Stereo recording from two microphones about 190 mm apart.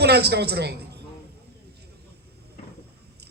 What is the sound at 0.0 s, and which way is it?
Speech, 60° right (ahead or behind).